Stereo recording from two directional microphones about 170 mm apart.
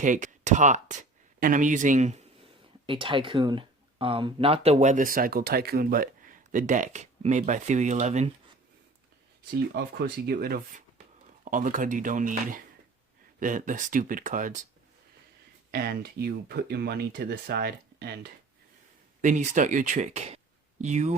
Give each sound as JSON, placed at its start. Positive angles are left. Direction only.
{"t": 0.0, "sound": "speech", "side_deg": -50}
{"t": 9.7, "sound": "speech", "side_deg": -65}
{"t": 15.7, "sound": "speech", "side_deg": -65}
{"t": 19.2, "sound": "speech", "side_deg": -45}